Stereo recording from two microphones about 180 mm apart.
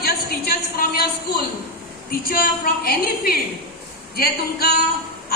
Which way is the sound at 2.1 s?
55° left (ahead or behind).